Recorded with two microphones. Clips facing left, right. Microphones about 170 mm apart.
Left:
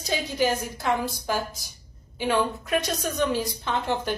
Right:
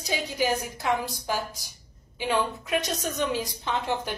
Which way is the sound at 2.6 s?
15° right (ahead or behind).